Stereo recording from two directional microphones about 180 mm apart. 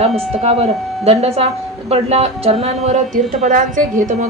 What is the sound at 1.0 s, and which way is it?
A woman's voice, 35° right (ahead or behind).